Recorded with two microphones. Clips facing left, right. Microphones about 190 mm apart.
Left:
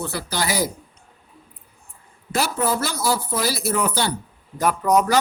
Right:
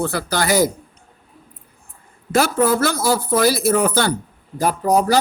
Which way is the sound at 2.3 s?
50° right (ahead or behind).